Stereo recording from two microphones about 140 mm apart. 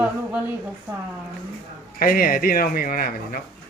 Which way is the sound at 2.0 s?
90° left.